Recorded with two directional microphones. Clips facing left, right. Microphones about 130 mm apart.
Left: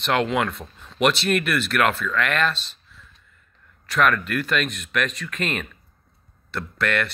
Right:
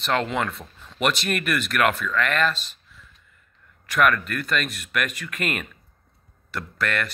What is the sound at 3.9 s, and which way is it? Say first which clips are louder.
Speech: even; 5° right (ahead or behind).